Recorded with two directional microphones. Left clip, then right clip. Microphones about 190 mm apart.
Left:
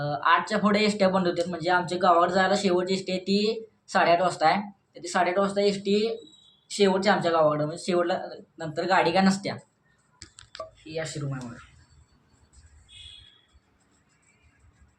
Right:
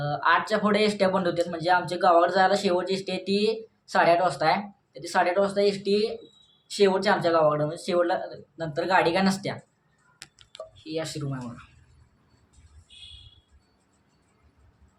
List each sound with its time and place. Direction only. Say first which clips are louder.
0.0 s speech: even; 5° right (ahead or behind)
10.8 s speech: right 2 dB; 20° right (ahead or behind)